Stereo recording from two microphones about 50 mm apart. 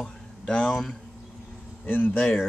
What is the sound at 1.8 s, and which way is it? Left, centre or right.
Speech, left.